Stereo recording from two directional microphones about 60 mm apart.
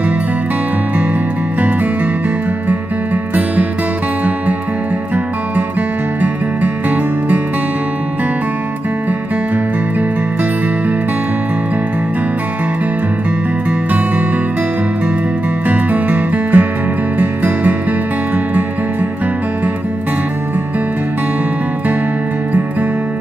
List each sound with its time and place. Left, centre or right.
13.7 s music: right
15.7 s music: right